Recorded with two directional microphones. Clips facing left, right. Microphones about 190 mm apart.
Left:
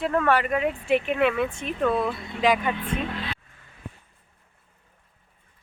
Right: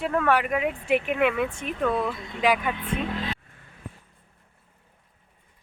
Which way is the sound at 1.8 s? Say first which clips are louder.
Left 2 dB; 10° left (ahead or behind).